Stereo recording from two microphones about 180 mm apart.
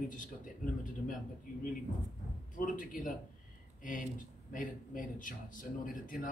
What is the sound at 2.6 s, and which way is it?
A man's voice, 50° left (ahead or behind).